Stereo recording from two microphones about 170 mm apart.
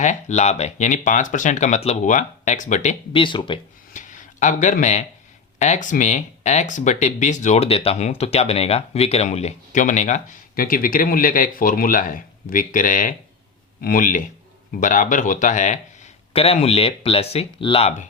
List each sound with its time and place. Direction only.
0.0 s speech: 45° left (ahead or behind)
3.1 s speech: 30° left (ahead or behind)
3.9 s a sound: 45° left (ahead or behind)
5.5 s speech: 45° left (ahead or behind)
16.3 s speech: 35° left (ahead or behind)